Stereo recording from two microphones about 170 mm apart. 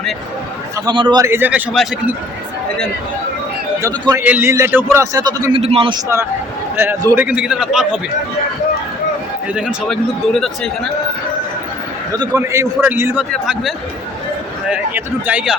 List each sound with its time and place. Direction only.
0.9 s a man's voice: 25° right (ahead or behind); by 1.6 s 10° right (ahead or behind)
3.8 s a man's voice: 15° right (ahead or behind); by 6.0 s 35° right (ahead or behind)
6.7 s a man's voice: 15° right (ahead or behind)
7.3 s a man's voice: 5° right (ahead or behind)
9.6 s a man's voice: centre (ahead or behind)
12.1 s a man's voice: 25° right (ahead or behind); by 15.5 s 10° right (ahead or behind)